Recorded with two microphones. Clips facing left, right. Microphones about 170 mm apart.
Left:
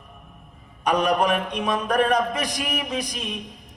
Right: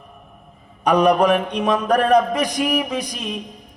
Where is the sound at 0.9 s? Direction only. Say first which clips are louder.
Right 6 dB; 30° right (ahead or behind).